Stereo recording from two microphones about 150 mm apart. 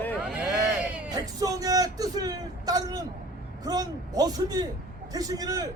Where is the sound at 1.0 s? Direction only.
25° right (ahead or behind).